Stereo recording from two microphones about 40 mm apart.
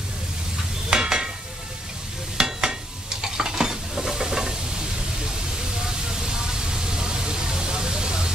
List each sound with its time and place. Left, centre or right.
0.8 s stir: centre
2.3 s stir: centre
6.1 s vehicle: centre